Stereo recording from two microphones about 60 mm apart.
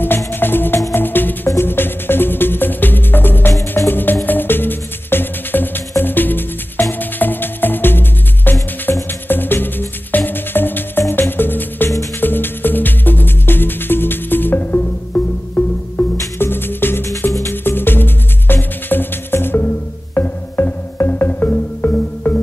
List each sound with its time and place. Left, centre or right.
0.3 s music: left